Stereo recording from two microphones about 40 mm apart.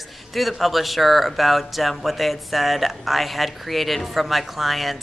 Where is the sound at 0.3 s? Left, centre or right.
Centre.